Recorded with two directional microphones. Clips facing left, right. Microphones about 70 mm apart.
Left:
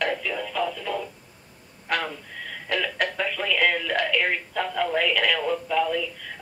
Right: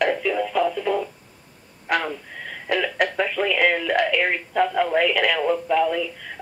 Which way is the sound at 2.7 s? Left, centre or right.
Centre.